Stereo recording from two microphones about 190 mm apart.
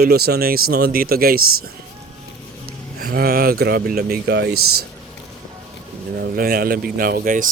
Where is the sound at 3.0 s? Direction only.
55° right (ahead or behind).